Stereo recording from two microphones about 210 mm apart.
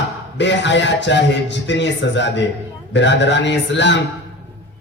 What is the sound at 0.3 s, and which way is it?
A man's voice, 55° left (ahead or behind).